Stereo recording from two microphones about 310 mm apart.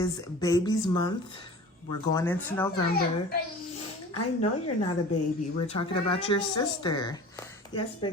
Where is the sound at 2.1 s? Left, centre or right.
Centre.